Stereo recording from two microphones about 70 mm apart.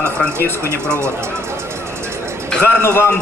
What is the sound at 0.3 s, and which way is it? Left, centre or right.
Speech, left.